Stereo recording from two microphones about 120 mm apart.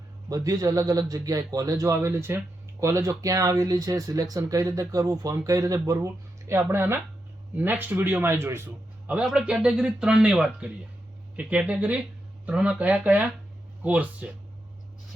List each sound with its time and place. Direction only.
0.3 s a man's voice: 30° right (ahead or behind)
9.1 s a man's voice: 5° right (ahead or behind)